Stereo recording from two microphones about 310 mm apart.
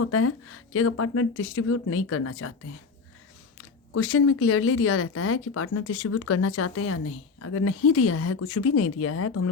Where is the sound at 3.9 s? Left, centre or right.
Left.